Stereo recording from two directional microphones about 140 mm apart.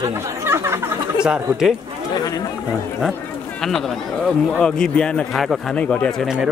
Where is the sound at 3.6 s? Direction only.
5° left (ahead or behind).